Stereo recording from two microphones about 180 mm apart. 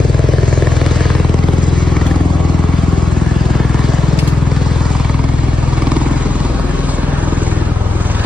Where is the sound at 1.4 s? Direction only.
25° left (ahead or behind).